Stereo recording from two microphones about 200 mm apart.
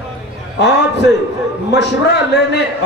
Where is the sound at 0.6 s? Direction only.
60° left (ahead or behind).